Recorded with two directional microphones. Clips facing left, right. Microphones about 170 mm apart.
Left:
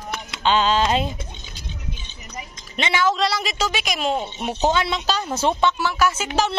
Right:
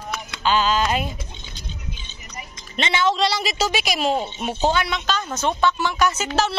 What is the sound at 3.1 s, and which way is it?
A woman's voice, centre (ahead or behind).